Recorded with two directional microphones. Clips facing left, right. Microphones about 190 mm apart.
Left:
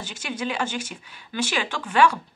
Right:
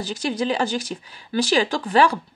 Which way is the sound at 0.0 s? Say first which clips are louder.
Right 6 dB; 35° right (ahead or behind).